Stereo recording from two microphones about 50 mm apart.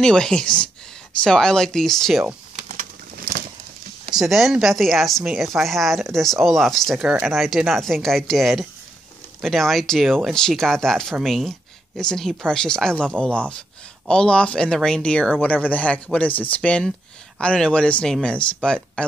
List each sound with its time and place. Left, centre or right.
0.0 s speech: centre
4.1 s speech: centre
7.0 s speech: centre
7.2 s speech: centre
11.2 s speech: centre
12.0 s speech: centre
15.4 s speech: left
17.6 s speech: left